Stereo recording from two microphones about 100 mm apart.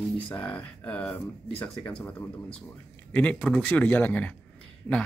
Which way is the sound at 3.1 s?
15° left (ahead or behind).